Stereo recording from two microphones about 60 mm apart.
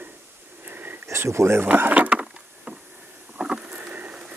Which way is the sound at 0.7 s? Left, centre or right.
Right.